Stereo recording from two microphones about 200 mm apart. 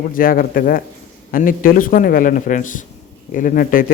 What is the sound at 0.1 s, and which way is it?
A man's voice, 45° left (ahead or behind).